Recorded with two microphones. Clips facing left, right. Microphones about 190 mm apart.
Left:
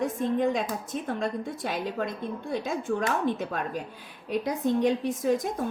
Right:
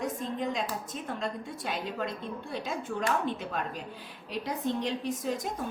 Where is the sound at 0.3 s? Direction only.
55° left (ahead or behind).